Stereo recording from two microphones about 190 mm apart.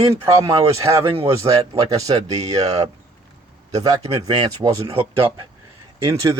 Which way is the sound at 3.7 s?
20° right (ahead or behind).